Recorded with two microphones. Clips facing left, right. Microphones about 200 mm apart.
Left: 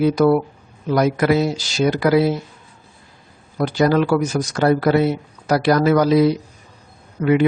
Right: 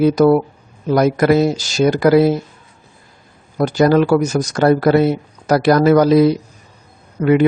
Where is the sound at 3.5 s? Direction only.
45° right (ahead or behind).